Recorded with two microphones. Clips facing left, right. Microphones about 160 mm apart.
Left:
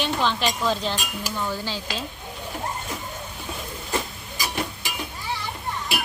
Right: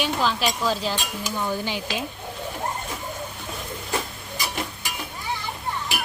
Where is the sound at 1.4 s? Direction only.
15° right (ahead or behind).